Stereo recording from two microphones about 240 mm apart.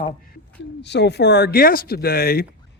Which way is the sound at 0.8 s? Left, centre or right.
Left.